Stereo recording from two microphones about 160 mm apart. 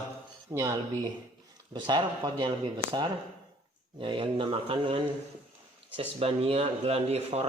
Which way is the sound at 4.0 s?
30° right (ahead or behind).